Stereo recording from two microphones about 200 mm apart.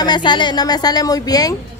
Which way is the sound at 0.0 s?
20° left (ahead or behind).